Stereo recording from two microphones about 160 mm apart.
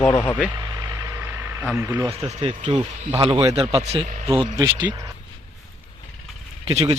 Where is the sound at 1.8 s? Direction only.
20° right (ahead or behind).